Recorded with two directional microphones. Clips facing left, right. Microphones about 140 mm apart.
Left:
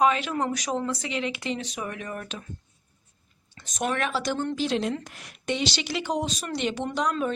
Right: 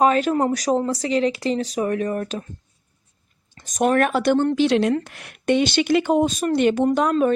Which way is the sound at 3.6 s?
45° right (ahead or behind).